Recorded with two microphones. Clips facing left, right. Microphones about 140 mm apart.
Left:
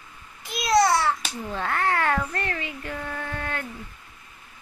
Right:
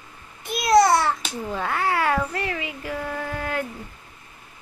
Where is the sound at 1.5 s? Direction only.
5° right (ahead or behind).